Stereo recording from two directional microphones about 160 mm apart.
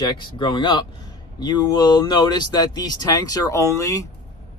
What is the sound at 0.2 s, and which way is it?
Speech, 30° left (ahead or behind).